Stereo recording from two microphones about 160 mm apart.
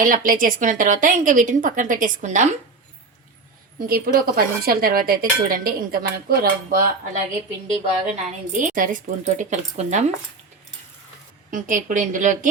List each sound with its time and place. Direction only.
0.0 s a woman's voice: 60° right (ahead or behind)
3.8 s speech: 65° right (ahead or behind)
8.1 s speech: 50° right (ahead or behind)
11.5 s speech: 55° right (ahead or behind)